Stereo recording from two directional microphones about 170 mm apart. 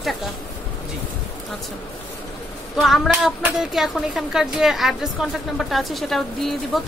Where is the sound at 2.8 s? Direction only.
Centre (ahead or behind).